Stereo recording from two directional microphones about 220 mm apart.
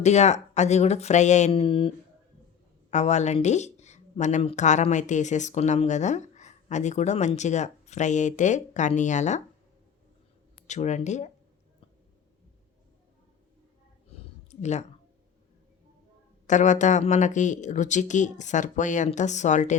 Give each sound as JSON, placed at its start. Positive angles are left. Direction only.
{"t": 0.0, "sound": "speech", "side_deg": 30}
{"t": 2.9, "sound": "speech", "side_deg": 30}
{"t": 10.7, "sound": "speech", "side_deg": 30}
{"t": 14.4, "sound": "a sound", "side_deg": 30}
{"t": 16.5, "sound": "speech", "side_deg": 35}